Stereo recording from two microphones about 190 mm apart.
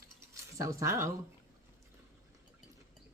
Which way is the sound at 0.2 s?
15° right (ahead or behind).